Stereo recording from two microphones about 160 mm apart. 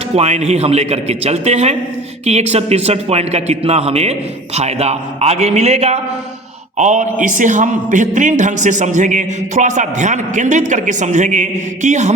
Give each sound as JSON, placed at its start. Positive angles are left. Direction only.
{"t": 0.2, "sound": "a man's voice", "side_deg": -45}